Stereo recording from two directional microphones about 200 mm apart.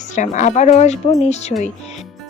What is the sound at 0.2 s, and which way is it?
Speech, 35° left (ahead or behind).